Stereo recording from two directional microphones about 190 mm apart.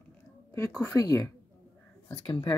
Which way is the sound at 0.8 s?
15° left (ahead or behind).